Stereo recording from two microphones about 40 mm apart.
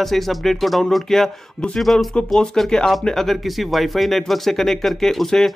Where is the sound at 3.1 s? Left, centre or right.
Centre.